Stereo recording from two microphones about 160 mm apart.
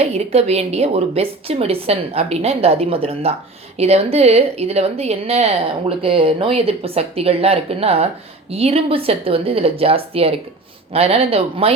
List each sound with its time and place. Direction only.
0.0 s a woman's voice: 40° right (ahead or behind)